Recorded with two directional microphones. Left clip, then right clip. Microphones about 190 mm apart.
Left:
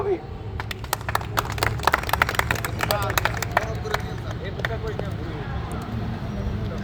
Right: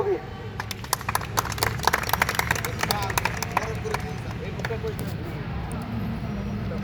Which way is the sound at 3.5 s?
5° left (ahead or behind).